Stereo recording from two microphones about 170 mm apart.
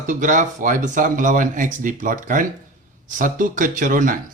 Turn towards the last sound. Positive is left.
turn(degrees=-50)  # may be behind; listen again after turning